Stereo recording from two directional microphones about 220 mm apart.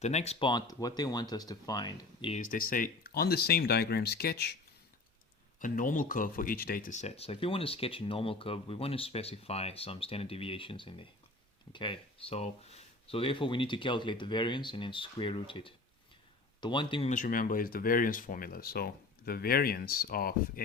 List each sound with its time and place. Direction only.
0.0 s speech: 30° left (ahead or behind)
2.3 s speech: 35° left (ahead or behind)
5.5 s speech: 35° left (ahead or behind)